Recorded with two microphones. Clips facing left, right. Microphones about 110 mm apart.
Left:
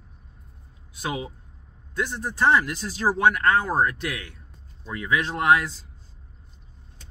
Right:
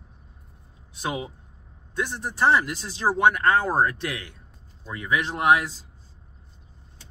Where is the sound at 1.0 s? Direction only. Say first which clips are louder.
Even; 25° right (ahead or behind).